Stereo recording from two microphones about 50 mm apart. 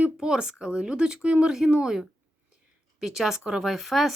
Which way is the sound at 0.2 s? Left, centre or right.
Centre.